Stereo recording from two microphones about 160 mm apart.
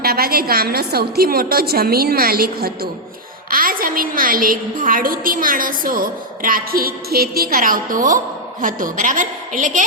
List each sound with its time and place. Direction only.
0.0 s a woman's voice: 70° right (ahead or behind)
3.5 s a woman's voice: 60° right (ahead or behind)